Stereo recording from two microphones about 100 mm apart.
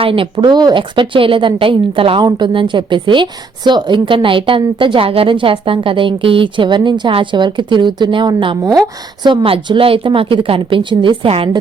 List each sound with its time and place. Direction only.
0.0 s a woman's voice: 60° right (ahead or behind)
0.3 s a woman's voice: 45° right (ahead or behind); by 2.2 s 65° right (ahead or behind)
2.2 s a woman's voice: 55° right (ahead or behind)